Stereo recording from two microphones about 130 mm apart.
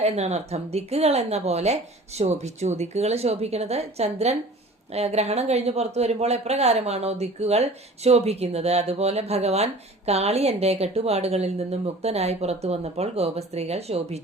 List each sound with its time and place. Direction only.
0.0 s speech: 60° right (ahead or behind)